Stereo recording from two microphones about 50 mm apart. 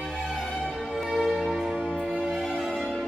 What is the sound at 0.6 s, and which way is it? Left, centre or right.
Church bell, centre.